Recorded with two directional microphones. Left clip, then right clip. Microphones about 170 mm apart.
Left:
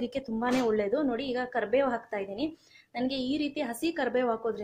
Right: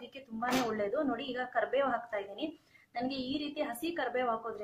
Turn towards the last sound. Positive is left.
turn(degrees=45)  # may be behind; listen again after turning